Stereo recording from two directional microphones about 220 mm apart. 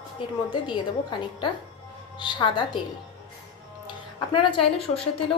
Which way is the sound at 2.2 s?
20° left (ahead or behind).